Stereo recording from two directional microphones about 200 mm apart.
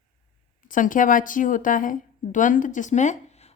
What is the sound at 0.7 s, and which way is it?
A woman's voice, 40° left (ahead or behind).